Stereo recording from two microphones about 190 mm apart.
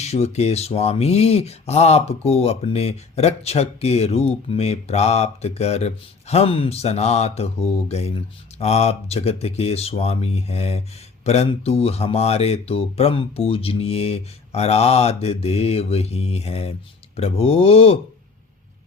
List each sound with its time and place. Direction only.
0.0 s speech: 35° left (ahead or behind)